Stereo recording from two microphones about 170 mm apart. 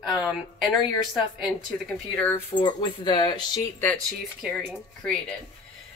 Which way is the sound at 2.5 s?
25° left (ahead or behind).